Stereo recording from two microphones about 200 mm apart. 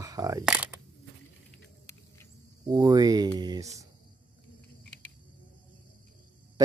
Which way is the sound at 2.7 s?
20° right (ahead or behind).